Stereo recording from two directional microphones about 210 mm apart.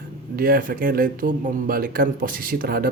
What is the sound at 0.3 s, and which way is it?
Speech, 45° right (ahead or behind).